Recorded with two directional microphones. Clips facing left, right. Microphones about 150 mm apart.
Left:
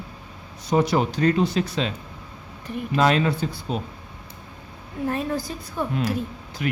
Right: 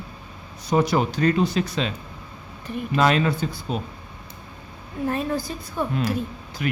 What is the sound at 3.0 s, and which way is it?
Speech, 30° left (ahead or behind).